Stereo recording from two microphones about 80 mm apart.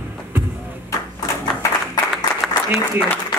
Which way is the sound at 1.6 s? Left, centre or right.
Left.